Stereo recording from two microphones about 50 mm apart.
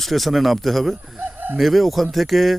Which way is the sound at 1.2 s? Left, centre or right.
Right.